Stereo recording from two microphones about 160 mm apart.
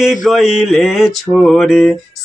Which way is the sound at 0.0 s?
Centre (ahead or behind).